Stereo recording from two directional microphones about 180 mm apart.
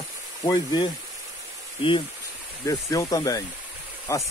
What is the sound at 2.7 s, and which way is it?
Speech, 20° left (ahead or behind).